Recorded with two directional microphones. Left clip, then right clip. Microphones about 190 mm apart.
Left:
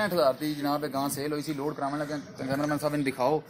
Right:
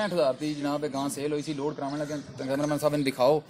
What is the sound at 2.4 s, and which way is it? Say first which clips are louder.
Speech: right 2 dB; 40° right (ahead or behind).